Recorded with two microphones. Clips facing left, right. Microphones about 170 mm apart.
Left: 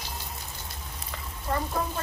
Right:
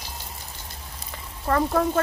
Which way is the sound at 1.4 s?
70° right (ahead or behind).